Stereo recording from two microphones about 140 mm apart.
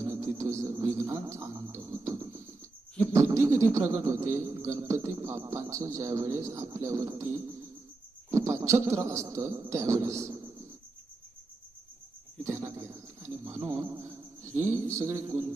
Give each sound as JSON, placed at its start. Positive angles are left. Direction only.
{"t": 0.0, "sound": "a sound", "side_deg": -20}
{"t": 3.1, "sound": "speech", "side_deg": -20}
{"t": 12.5, "sound": "bird", "side_deg": -20}
{"t": 13.7, "sound": "cricket", "side_deg": -25}